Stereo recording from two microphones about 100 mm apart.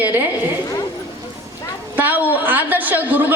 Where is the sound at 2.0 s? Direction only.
20° right (ahead or behind).